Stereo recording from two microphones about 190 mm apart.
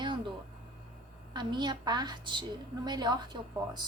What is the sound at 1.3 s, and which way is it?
A woman's voice, 25° right (ahead or behind).